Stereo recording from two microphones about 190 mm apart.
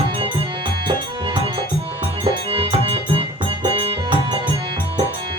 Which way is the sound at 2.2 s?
25° right (ahead or behind).